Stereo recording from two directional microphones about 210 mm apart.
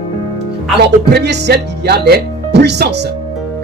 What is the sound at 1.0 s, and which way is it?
Speech, 50° right (ahead or behind).